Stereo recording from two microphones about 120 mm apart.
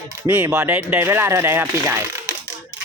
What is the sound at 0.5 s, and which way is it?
Speech, 15° right (ahead or behind).